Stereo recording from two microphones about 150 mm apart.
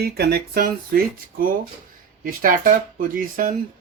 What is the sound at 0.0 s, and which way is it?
Speech, 90° right.